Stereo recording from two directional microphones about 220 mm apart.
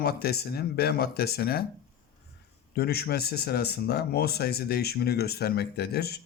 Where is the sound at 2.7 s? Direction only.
45° left (ahead or behind).